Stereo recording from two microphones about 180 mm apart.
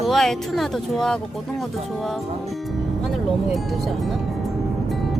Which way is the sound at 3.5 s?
Centre (ahead or behind).